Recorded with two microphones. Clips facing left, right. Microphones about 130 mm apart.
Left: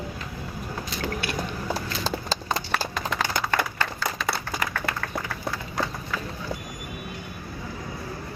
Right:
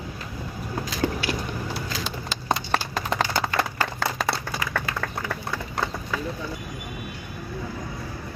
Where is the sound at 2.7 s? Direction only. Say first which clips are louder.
Right 2 dB; 30° right (ahead or behind).